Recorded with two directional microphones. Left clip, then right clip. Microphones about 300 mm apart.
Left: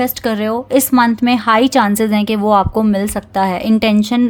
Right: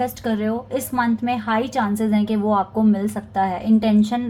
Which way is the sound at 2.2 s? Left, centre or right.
Left.